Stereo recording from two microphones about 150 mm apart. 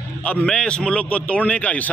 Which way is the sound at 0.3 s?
5° left (ahead or behind).